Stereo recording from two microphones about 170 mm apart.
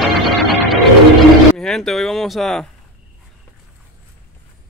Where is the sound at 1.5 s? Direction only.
5° left (ahead or behind).